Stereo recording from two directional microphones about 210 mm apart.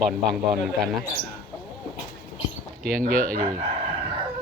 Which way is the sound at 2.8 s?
5° left (ahead or behind).